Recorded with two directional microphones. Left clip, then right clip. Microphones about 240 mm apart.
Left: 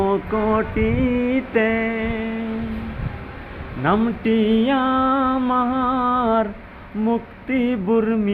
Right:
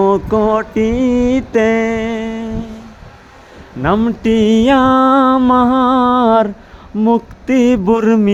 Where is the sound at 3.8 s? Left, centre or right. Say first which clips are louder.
Right 5 dB; right.